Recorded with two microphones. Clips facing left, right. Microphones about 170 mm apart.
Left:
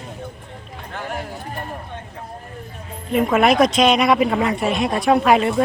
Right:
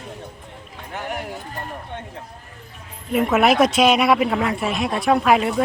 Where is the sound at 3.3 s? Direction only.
5° right (ahead or behind).